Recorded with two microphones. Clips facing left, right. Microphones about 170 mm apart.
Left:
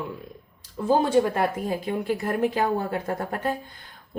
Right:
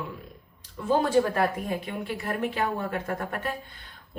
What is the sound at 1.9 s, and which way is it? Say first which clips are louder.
Speech: left 6 dB; 40° left (ahead or behind).